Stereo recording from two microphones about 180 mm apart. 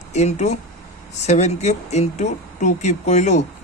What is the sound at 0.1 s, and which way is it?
A man's voice, 40° left (ahead or behind).